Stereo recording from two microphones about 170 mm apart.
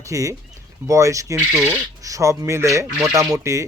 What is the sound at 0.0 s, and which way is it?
Speech, 20° right (ahead or behind).